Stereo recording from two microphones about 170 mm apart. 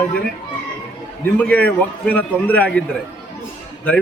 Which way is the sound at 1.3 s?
10° left (ahead or behind).